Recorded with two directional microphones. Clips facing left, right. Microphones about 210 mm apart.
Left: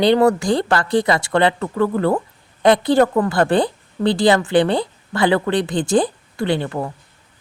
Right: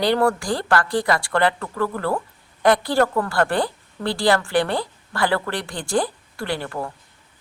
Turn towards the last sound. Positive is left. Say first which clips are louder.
# left 6 dB
turn(degrees=20)  # may be behind; listen again after turning